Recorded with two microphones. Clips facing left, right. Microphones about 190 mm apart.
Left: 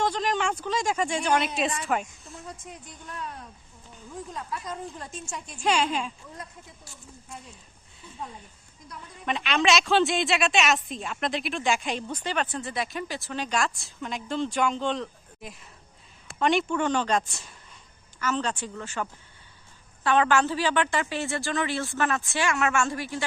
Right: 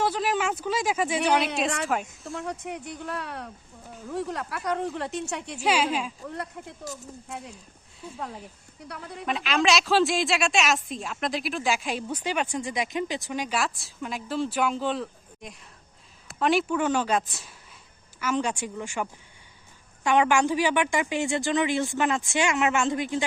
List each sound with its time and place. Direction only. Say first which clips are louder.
0.0 s a woman's voice: right 1 dB; 5° right (ahead or behind)
2.2 s a woman's voice: right 8 dB; 65° right (ahead or behind)
5.6 s a woman's voice: even; 5° right (ahead or behind)
6.2 s a woman's voice: right 8 dB; 70° right (ahead or behind)
9.2 s a woman's voice: even; centre (ahead or behind)
20.1 s speech: right 1 dB; 15° right (ahead or behind)